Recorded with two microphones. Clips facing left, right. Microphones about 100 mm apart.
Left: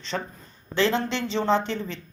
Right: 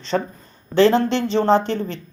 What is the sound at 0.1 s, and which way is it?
Speech, 50° right (ahead or behind).